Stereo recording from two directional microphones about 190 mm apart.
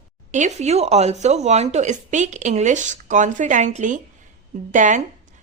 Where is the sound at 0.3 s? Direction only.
40° right (ahead or behind).